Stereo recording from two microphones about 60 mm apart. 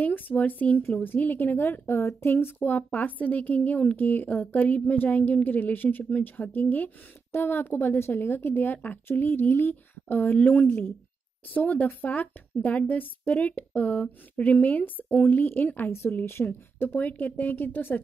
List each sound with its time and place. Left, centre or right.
0.0 s a woman's voice: left
16.4 s a woman's voice: centre